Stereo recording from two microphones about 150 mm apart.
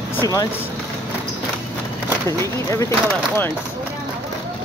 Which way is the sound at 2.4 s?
20° left (ahead or behind).